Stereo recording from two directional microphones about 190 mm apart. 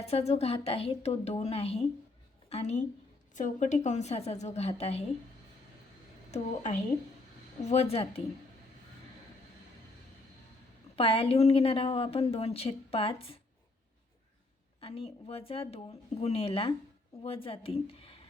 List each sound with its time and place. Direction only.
0.0 s speech: 35° left (ahead or behind)
6.3 s speech: 35° left (ahead or behind)
10.9 s a woman's voice: 30° left (ahead or behind)
14.8 s a woman's voice: 30° left (ahead or behind)